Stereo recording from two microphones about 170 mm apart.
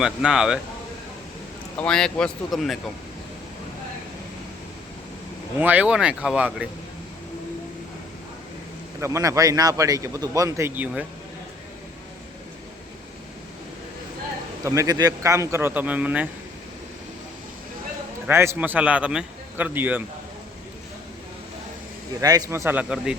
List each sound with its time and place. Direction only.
0.0 s speech: 5° right (ahead or behind)
1.8 s speech: 5° left (ahead or behind)
5.5 s a man's voice: 10° right (ahead or behind)
9.0 s a man's voice: 20° right (ahead or behind)
14.6 s a man's voice: 20° right (ahead or behind)
18.3 s a man's voice: 15° right (ahead or behind)
22.2 s a man's voice: 20° right (ahead or behind)